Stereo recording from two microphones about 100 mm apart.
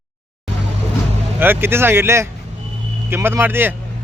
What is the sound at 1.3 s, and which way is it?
Speech, 20° right (ahead or behind).